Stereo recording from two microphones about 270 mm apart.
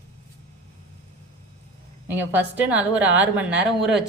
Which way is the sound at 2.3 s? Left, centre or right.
Centre.